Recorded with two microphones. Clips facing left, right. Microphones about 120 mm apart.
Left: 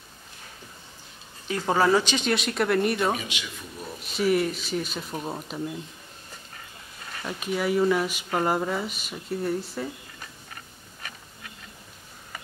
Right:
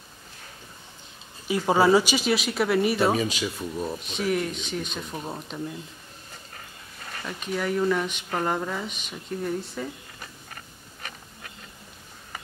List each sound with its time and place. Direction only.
1.5 s speech: 10° right (ahead or behind)
3.2 s speech: 40° right (ahead or behind)
4.0 s speech: 5° left (ahead or behind)
7.2 s speech: 5° left (ahead or behind)